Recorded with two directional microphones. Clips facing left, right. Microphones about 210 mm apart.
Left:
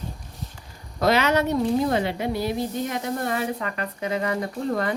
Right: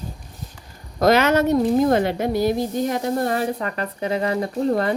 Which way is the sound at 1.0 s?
45° right (ahead or behind).